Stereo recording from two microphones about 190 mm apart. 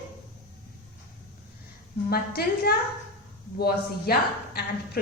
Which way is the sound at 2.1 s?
55° left (ahead or behind).